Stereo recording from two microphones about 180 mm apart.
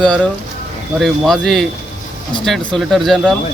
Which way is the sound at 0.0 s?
5° left (ahead or behind).